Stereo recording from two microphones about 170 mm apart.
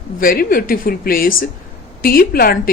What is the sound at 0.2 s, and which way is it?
A woman's voice, 55° left (ahead or behind).